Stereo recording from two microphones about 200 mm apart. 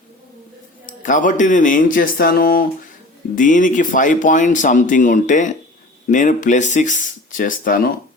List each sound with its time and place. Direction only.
1.0 s speech: 40° left (ahead or behind)